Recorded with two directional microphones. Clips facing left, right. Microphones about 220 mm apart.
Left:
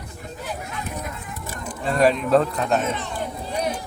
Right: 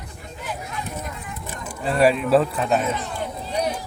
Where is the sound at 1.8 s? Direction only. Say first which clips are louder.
Right 1 dB; 5° right (ahead or behind).